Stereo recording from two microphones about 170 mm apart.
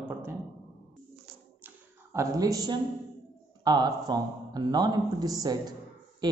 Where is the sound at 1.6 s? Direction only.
10° right (ahead or behind).